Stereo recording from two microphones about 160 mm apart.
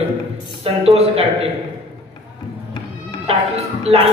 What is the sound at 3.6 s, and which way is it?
Speech, 40° right (ahead or behind).